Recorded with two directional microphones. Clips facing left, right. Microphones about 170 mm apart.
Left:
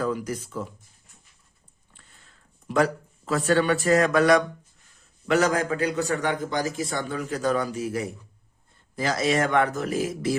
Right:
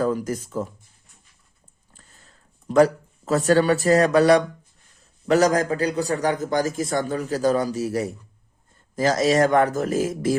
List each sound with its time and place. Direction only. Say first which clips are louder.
0.0 s speech: right 4 dB; 40° right (ahead or behind)
1.9 s a sound: right 3 dB; 40° right (ahead or behind)
5.3 s a man's voice: right 4 dB; 40° right (ahead or behind)